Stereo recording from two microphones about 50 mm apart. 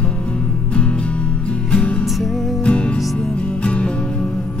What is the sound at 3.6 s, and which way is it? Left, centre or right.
Music, left.